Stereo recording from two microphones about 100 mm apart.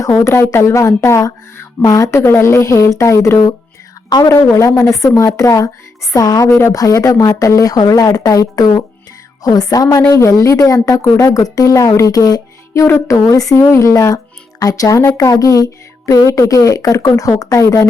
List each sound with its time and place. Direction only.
0.0 s speech: 30° left (ahead or behind)
6.5 s speech: 25° left (ahead or behind)